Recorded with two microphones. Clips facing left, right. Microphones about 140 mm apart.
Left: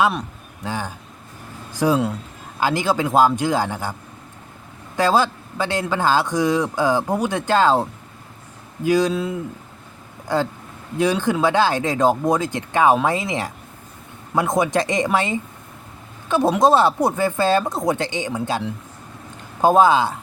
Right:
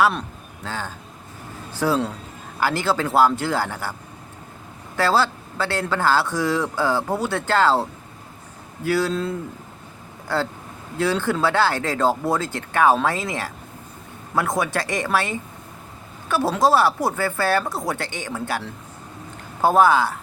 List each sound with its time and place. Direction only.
0.0 s a man's voice: 15° left (ahead or behind)
4.9 s a man's voice: 15° left (ahead or behind)